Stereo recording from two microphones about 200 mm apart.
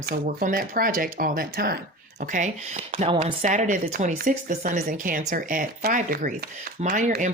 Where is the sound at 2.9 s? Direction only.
30° right (ahead or behind).